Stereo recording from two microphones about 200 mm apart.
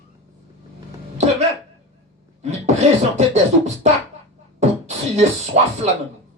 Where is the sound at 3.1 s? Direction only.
35° right (ahead or behind).